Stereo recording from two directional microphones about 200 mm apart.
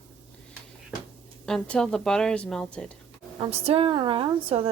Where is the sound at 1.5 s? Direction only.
5° left (ahead or behind).